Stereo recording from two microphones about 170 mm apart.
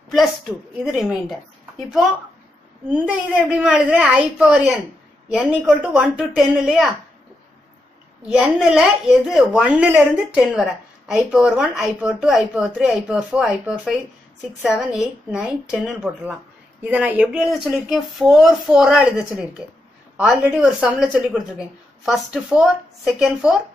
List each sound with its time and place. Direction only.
0.1 s a woman's voice: centre (ahead or behind)
2.9 s a woman's voice: 10° right (ahead or behind)
8.3 s a woman's voice: 5° right (ahead or behind)